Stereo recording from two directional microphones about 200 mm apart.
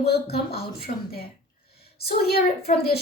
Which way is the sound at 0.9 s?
40° left (ahead or behind).